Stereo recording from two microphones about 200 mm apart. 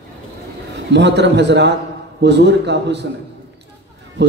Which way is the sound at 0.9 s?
60° right (ahead or behind).